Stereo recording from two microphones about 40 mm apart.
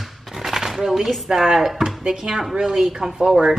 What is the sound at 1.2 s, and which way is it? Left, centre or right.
Speech, centre.